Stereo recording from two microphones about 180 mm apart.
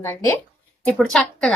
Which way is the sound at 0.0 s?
15° left (ahead or behind).